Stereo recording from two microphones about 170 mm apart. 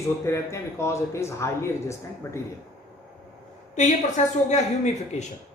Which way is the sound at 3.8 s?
45° left (ahead or behind).